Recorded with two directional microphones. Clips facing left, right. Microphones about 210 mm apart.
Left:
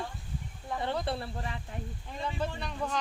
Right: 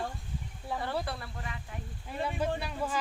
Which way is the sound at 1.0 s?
30° left (ahead or behind).